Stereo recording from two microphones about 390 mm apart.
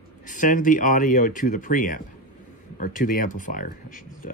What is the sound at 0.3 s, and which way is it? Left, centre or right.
Speech, centre.